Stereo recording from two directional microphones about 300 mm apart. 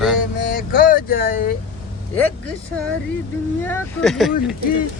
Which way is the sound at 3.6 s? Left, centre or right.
Centre.